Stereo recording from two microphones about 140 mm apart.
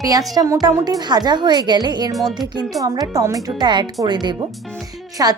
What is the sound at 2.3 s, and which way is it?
Speech, 30° right (ahead or behind).